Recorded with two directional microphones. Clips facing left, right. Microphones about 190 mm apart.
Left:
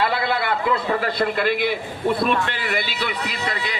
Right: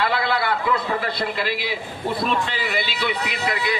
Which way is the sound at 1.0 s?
55° left (ahead or behind).